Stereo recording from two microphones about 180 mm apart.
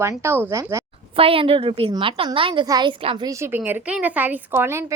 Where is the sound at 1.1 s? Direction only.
30° right (ahead or behind).